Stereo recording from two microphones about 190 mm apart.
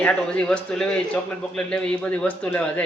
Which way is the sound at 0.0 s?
5° left (ahead or behind).